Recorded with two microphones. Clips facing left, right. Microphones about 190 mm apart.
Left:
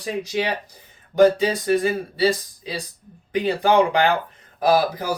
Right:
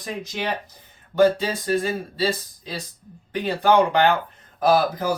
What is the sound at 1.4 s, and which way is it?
Speech, 15° left (ahead or behind).